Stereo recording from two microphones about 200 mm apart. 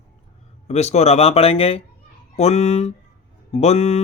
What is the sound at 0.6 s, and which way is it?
Speech, 30° left (ahead or behind).